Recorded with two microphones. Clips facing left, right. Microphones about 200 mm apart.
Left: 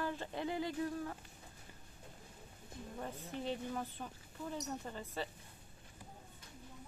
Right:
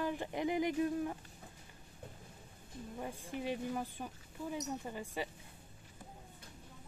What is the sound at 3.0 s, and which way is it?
Speech, 10° right (ahead or behind).